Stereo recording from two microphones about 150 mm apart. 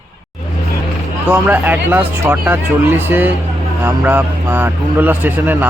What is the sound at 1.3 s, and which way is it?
A man's voice, 10° right (ahead or behind).